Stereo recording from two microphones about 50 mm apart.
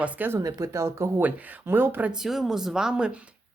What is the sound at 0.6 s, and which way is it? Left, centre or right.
Speech, right.